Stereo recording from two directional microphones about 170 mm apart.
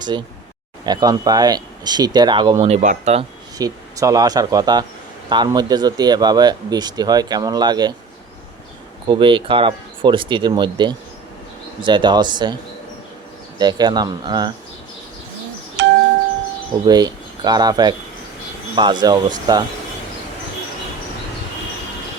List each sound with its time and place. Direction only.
0.0 s speech: 25° right (ahead or behind)
3.6 s speech: 20° right (ahead or behind)
9.0 s speech: 30° right (ahead or behind)
13.6 s speech: 25° right (ahead or behind)
15.8 s doorbell: 90° right
16.8 s speech: 25° right (ahead or behind)